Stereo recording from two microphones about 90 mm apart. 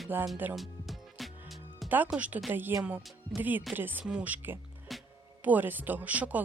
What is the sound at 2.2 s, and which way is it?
Speech, 15° right (ahead or behind).